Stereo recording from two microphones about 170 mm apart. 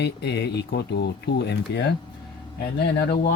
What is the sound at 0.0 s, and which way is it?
Speech, 80° left.